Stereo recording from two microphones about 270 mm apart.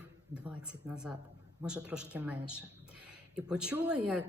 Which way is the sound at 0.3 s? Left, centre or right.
Centre.